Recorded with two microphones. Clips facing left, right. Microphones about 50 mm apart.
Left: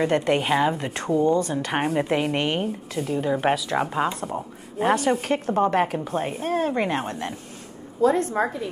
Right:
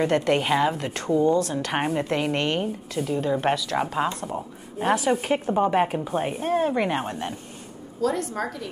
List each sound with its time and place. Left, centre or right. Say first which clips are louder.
0.0 s a woman's voice: even; centre
6.4 s speech: right 1 dB; right
6.9 s speech: even; centre
8.0 s a woman's voice: left 5 dB; left